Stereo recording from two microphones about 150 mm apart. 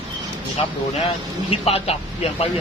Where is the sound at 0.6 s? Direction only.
40° left (ahead or behind).